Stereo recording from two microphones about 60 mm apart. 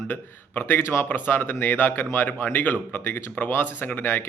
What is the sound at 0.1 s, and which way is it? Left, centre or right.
Speech, left.